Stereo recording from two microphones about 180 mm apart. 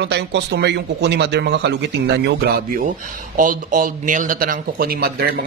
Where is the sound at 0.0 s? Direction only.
70° right (ahead or behind).